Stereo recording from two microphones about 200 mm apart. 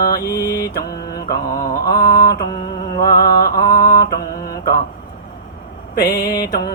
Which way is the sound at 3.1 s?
50° left (ahead or behind).